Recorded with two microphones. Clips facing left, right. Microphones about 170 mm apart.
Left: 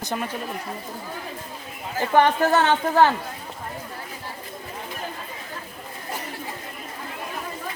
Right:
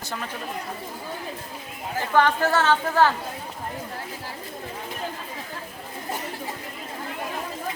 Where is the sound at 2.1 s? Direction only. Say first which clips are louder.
Left 2 dB; 20° left (ahead or behind).